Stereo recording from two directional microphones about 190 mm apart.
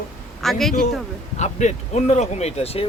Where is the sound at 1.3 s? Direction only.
35° left (ahead or behind).